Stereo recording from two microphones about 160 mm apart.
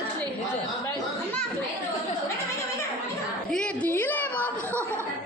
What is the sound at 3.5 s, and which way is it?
A woman's voice, 5° left (ahead or behind).